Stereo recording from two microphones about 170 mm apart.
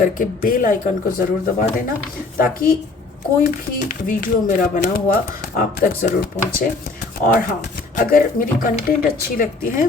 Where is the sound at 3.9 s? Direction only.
55° left (ahead or behind).